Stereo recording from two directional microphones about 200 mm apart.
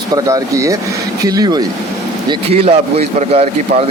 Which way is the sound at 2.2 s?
30° right (ahead or behind).